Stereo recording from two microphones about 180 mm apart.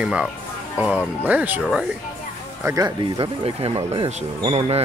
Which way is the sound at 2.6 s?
20° right (ahead or behind).